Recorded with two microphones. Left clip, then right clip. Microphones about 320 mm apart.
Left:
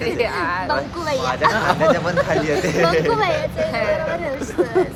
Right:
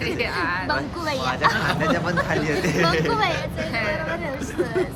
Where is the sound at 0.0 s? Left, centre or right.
Centre.